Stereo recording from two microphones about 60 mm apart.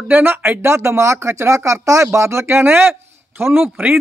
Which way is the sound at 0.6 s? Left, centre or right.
Right.